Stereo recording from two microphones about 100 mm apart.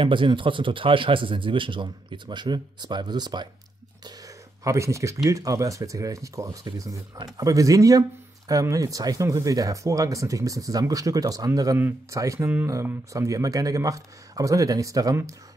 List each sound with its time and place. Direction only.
0.0 s a man's voice: 55° right (ahead or behind)
4.6 s speech: 30° right (ahead or behind)